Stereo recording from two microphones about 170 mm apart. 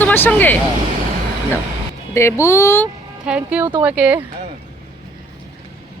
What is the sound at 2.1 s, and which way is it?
Speech, 15° left (ahead or behind).